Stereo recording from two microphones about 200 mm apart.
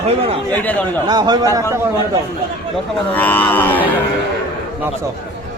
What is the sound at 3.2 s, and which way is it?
Cattle, 10° left (ahead or behind).